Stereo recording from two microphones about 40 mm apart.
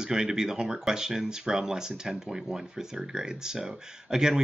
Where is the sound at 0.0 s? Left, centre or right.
Centre.